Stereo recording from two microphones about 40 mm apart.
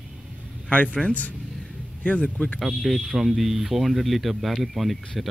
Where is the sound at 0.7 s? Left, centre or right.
Left.